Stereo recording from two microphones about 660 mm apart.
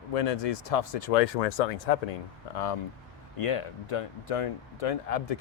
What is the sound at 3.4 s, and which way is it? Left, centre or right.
Speech, left.